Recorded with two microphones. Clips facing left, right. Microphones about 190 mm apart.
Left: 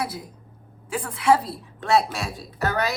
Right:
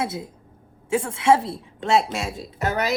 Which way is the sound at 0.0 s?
25° right (ahead or behind).